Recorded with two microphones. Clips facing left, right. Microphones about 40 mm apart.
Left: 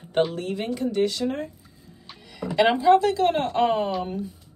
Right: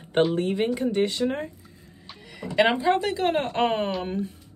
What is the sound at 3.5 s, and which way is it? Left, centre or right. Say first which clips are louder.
Speech: left 2 dB; right.